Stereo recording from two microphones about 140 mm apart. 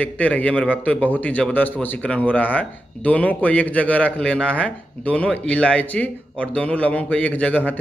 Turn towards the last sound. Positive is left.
turn(degrees=10)  # may be behind; listen again after turning